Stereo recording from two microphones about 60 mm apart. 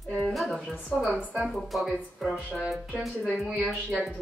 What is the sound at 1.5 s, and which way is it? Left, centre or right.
Speech, centre.